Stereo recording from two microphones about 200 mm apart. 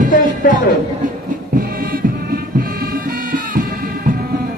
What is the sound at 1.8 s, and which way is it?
Music, 45° right (ahead or behind).